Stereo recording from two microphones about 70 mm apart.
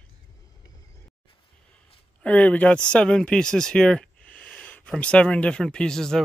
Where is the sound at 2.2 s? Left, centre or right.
Centre.